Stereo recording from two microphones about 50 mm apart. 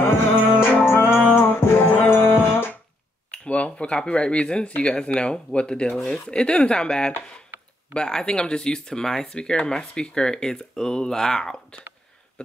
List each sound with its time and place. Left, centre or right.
0.4 s music: centre
0.8 s music: left
3.3 s speech: left